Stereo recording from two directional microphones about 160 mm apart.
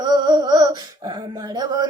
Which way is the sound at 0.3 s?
25° right (ahead or behind).